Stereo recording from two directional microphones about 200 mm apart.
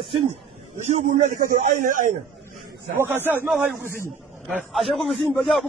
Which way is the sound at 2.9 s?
10° right (ahead or behind).